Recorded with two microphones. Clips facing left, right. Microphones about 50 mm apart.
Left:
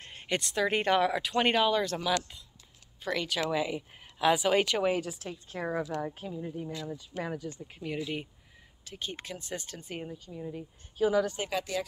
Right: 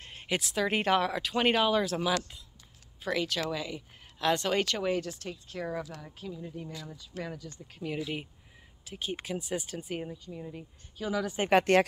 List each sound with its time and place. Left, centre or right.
0.0 s speech: centre
5.6 s speech: left
6.5 s speech: centre
7.8 s speech: centre
11.0 s speech: centre
11.5 s speech: right